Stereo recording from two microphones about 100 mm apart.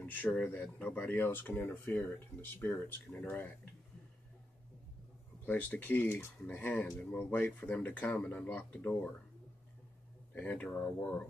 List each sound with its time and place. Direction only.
0.0 s speech: 15° left (ahead or behind)
5.4 s speech: 15° left (ahead or behind)
10.3 s speech: 15° left (ahead or behind)